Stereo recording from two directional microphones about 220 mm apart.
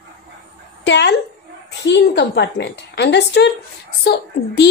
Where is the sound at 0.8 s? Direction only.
50° left (ahead or behind).